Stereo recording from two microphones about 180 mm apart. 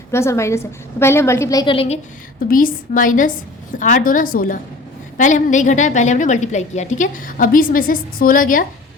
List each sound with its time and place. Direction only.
0.1 s a woman's voice: 15° left (ahead or behind); by 2.0 s 30° left (ahead or behind)
2.5 s a woman's voice: 50° left (ahead or behind)